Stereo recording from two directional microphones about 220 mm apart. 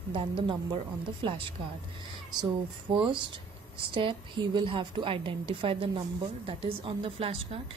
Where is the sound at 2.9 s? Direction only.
20° right (ahead or behind).